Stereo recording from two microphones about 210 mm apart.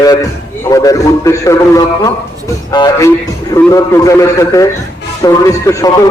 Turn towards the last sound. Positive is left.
turn(degrees=15)  # may be behind; listen again after turning